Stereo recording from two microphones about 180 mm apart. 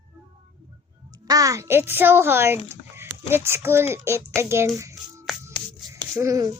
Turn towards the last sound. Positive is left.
turn(degrees=-20)  # may be behind; listen again after turning